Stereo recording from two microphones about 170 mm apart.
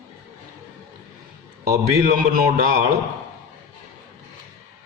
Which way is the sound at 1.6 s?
65° right (ahead or behind).